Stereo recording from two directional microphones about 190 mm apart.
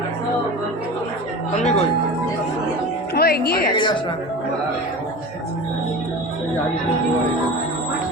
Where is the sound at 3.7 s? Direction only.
25° left (ahead or behind).